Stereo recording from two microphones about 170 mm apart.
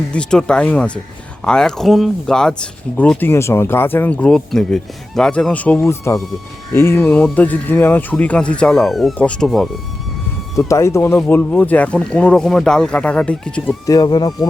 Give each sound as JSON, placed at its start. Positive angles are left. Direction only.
{"t": 0.1, "sound": "speech", "side_deg": 5}
{"t": 10.7, "sound": "speech", "side_deg": 15}
{"t": 13.8, "sound": "speech", "side_deg": 25}